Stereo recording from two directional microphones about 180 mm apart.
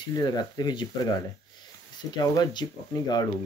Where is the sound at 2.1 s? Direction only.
20° left (ahead or behind).